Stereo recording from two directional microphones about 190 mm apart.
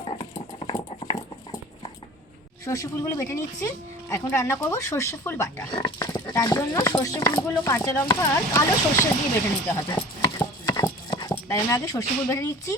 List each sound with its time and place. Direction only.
0.3 s dog: 30° left (ahead or behind)
2.6 s speech: 15° left (ahead or behind)
9.7 s clip-clop: 20° left (ahead or behind)